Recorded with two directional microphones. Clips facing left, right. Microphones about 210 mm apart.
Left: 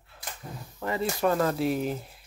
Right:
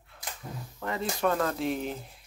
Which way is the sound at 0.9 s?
5° left (ahead or behind).